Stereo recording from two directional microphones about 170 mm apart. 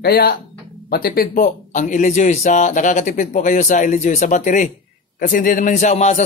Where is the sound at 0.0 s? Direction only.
65° left (ahead or behind).